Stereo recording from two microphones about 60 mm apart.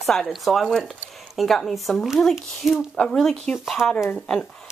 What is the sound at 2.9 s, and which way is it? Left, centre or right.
Speech, centre.